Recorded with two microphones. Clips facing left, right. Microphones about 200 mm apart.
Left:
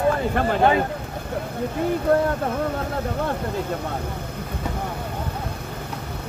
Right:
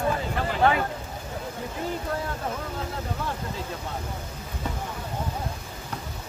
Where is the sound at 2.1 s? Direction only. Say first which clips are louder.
Left 16 dB; 60° left (ahead or behind).